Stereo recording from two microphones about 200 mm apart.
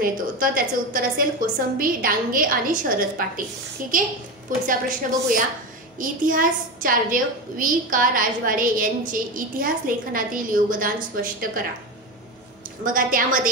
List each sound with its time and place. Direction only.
0.0 s a woman's voice: 45° right (ahead or behind)
12.8 s a woman's voice: 45° right (ahead or behind)